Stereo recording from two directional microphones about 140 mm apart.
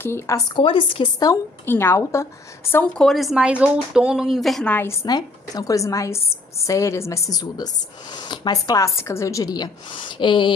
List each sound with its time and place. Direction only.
0.0 s a woman's voice: 15° left (ahead or behind)
0.6 s speech: 40° left (ahead or behind)
1.7 s a woman's voice: 15° left (ahead or behind)
2.7 s speech: 5° left (ahead or behind)
5.0 s speech: 30° left (ahead or behind)